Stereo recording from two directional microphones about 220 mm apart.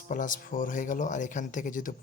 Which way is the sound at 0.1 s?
35° left (ahead or behind).